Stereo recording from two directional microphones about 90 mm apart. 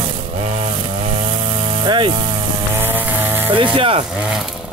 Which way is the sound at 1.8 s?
70° right (ahead or behind).